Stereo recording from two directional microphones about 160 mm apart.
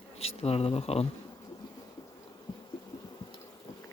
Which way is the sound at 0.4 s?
40° left (ahead or behind).